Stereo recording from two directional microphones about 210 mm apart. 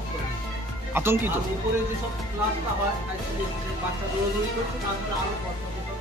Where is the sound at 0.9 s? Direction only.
10° right (ahead or behind).